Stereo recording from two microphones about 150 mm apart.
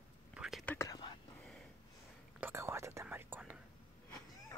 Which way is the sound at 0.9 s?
30° left (ahead or behind).